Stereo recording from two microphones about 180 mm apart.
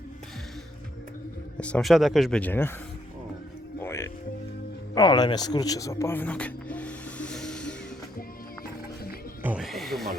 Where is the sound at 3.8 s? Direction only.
15° left (ahead or behind).